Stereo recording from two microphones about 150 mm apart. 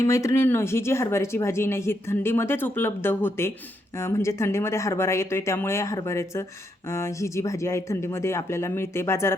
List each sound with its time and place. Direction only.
0.0 s speech: 20° left (ahead or behind)